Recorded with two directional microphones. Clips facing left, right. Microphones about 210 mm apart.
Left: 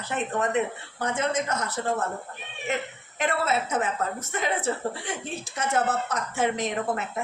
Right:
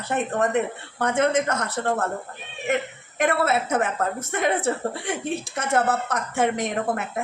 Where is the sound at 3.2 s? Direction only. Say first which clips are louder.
Right 4 dB; 55° right (ahead or behind).